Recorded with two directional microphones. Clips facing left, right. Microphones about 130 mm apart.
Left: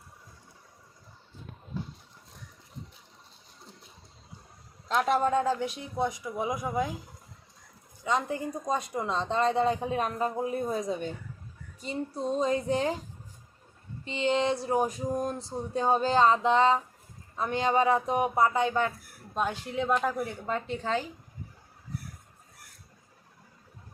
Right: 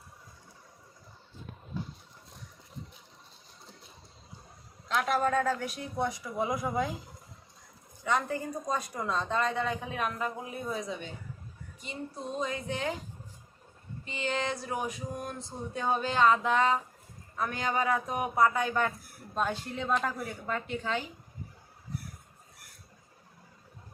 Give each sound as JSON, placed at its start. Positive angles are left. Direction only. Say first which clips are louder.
{"t": 4.9, "sound": "speech", "louder": "left 3 dB", "side_deg": 30}
{"t": 8.0, "sound": "a woman's voice", "louder": "left 1 dB", "side_deg": 20}
{"t": 14.0, "sound": "a woman's voice", "louder": "left 6 dB", "side_deg": 25}